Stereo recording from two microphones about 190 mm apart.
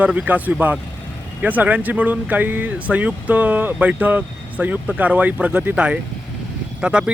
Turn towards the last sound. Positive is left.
turn(degrees=-5)  # may be behind; listen again after turning